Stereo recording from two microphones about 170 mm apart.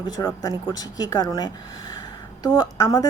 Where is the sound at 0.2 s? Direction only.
20° left (ahead or behind).